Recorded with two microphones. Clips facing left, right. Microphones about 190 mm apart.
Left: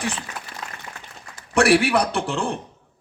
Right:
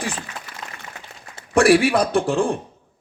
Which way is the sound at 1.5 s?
65° left (ahead or behind).